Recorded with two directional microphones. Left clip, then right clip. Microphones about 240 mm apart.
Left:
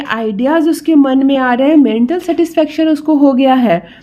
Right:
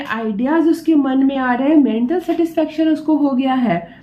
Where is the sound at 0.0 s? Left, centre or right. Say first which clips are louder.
Left 6 dB; left.